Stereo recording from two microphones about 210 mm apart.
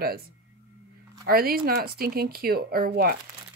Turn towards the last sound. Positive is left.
turn(degrees=-45)  # may be behind; listen again after turning